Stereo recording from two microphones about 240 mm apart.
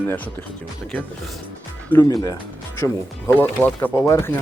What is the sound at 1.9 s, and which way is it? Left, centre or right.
Speech, centre.